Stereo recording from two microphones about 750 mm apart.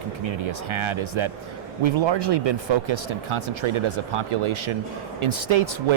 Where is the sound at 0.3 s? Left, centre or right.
Right.